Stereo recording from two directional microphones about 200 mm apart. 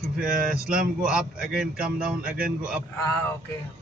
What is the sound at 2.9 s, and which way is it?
Speech, 10° left (ahead or behind).